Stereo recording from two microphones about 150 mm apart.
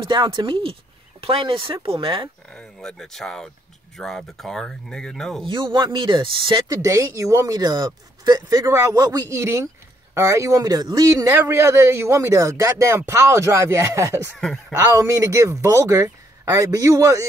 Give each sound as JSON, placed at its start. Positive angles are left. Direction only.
{"t": 0.0, "sound": "speech", "side_deg": -30}
{"t": 2.5, "sound": "speech", "side_deg": 5}
{"t": 5.4, "sound": "speech", "side_deg": -30}
{"t": 6.8, "sound": "a man's voice", "side_deg": -20}
{"t": 14.3, "sound": "speech", "side_deg": 5}
{"t": 15.0, "sound": "a man's voice", "side_deg": -20}